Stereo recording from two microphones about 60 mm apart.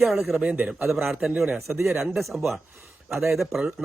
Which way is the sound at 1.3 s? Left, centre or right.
Right.